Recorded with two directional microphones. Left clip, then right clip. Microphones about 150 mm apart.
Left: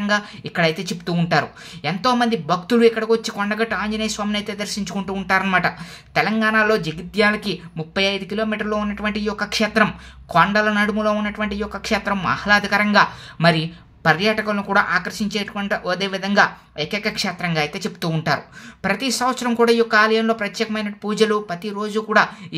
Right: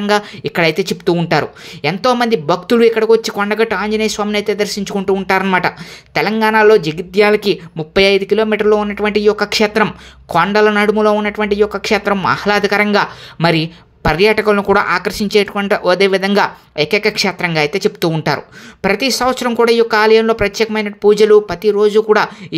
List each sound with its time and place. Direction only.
0.0 s speech: 50° right (ahead or behind)